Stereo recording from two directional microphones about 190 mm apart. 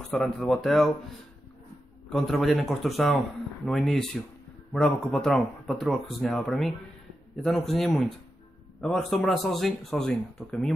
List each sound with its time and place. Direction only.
0.1 s speech: centre (ahead or behind)
2.0 s speech: centre (ahead or behind)